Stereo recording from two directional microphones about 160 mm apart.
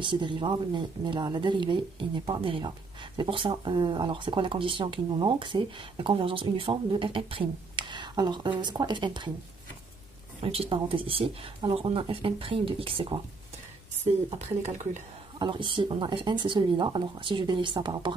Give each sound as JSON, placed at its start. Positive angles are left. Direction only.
{"t": 0.0, "sound": "speech", "side_deg": -30}
{"t": 10.4, "sound": "speech", "side_deg": -35}
{"t": 14.6, "sound": "speech", "side_deg": -50}
{"t": 15.3, "sound": "speech", "side_deg": -30}